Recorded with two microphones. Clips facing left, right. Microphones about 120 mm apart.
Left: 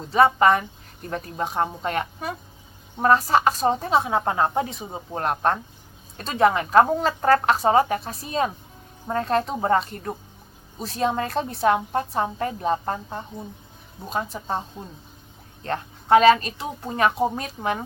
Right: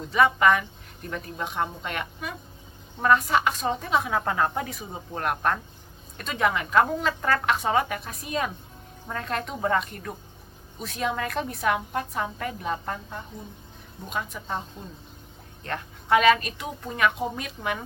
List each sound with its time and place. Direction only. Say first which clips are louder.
0.1 s a woman's voice: left 3 dB; 35° left (ahead or behind)
15.6 s a woman's voice: left 5 dB; 35° left (ahead or behind)